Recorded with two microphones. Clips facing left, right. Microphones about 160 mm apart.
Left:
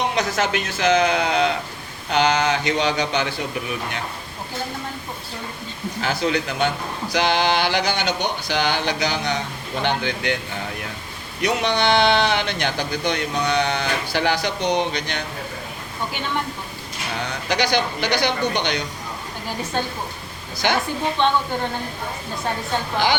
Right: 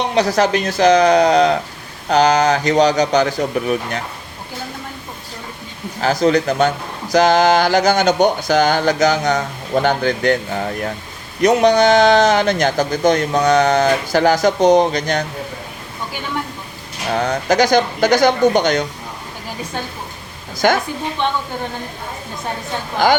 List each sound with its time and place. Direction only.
0.1 s speech: 35° right (ahead or behind)
6.0 s a man's voice: 40° right (ahead or behind)
17.2 s a man's voice: 45° right (ahead or behind)
20.6 s a man's voice: 45° right (ahead or behind)
23.0 s a man's voice: 45° right (ahead or behind)